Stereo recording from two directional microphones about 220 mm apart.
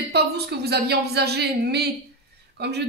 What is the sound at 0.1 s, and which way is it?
A man's voice, 45° right (ahead or behind).